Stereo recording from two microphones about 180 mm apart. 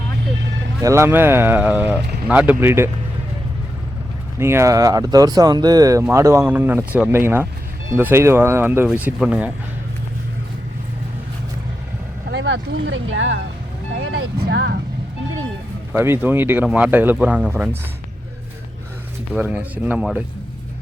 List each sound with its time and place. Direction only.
0.8 s speech: 15° right (ahead or behind)
4.4 s speech: 15° right (ahead or behind)
12.3 s speech: 90° right
14.3 s speech: 70° right (ahead or behind)
15.9 s speech: 10° right (ahead or behind)
19.4 s speech: 10° right (ahead or behind)